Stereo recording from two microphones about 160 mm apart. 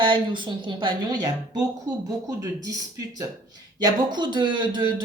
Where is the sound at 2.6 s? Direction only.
20° right (ahead or behind).